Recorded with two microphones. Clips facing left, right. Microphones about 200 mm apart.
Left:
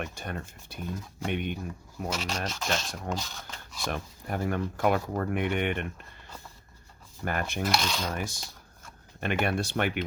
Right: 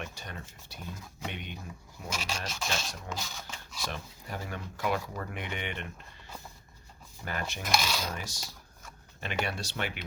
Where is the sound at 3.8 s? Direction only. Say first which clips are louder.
Left 6 dB; 55° left (ahead or behind).